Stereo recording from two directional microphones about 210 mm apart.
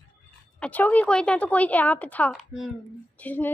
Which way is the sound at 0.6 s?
5° left (ahead or behind).